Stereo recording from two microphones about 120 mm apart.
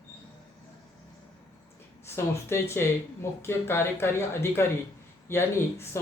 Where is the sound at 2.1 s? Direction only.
20° left (ahead or behind).